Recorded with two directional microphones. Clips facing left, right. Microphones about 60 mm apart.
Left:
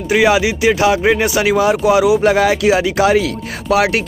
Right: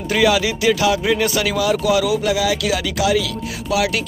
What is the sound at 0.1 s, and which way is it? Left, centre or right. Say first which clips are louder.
Speech: left 4 dB; left.